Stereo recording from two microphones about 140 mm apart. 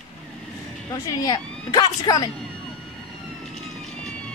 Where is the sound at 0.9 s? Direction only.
25° left (ahead or behind).